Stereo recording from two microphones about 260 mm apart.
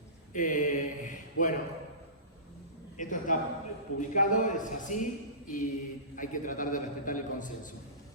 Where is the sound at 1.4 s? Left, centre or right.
Left.